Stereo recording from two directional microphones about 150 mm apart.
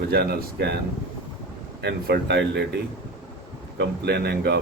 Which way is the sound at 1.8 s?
90° right.